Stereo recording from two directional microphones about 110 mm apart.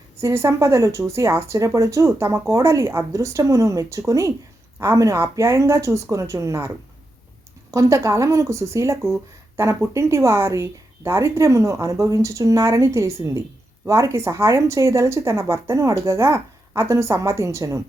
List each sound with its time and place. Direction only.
0.2 s speech: 25° right (ahead or behind)
7.7 s speech: 30° right (ahead or behind)